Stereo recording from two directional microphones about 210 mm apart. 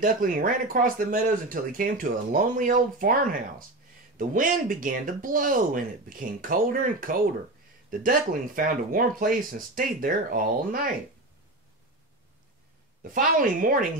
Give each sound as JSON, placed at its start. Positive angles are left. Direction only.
{"t": 0.0, "sound": "speech", "side_deg": -40}
{"t": 13.0, "sound": "speech", "side_deg": -40}